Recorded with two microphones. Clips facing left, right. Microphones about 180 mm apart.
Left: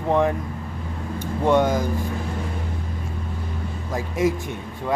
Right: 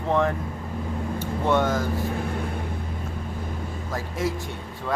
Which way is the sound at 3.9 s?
20° left (ahead or behind).